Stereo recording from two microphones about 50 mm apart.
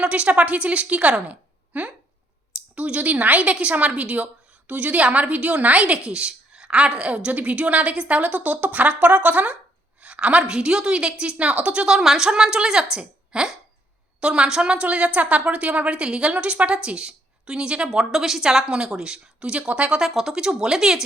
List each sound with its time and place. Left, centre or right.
0.0 s a woman's voice: right
11.9 s a woman's voice: centre
20.0 s a woman's voice: centre